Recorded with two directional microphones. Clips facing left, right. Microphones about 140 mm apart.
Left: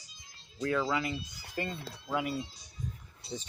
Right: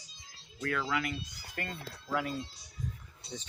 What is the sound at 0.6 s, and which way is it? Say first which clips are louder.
Speech: left 3 dB; 20° left (ahead or behind).